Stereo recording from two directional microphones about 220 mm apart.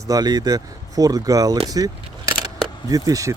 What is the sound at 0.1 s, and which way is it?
Speech, 15° right (ahead or behind).